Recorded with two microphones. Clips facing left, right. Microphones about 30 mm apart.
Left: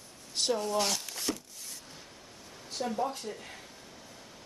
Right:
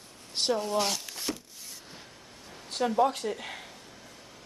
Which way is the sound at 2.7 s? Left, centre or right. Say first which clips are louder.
Right 6 dB; right.